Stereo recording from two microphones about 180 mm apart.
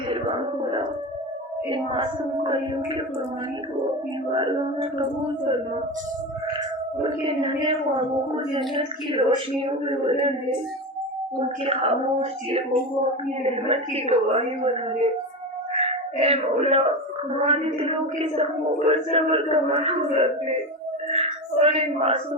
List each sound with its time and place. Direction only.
0.1 s a sound: 30° right (ahead or behind)
1.7 s a woman's voice: 25° right (ahead or behind)
4.4 s a woman's voice: 25° right (ahead or behind)
7.0 s a woman's voice: 30° right (ahead or behind)
11.3 s a woman's voice: 30° right (ahead or behind)
21.1 s a sound: 35° right (ahead or behind)